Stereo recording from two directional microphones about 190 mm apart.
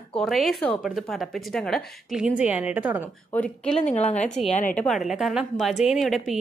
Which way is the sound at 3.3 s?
5° left (ahead or behind).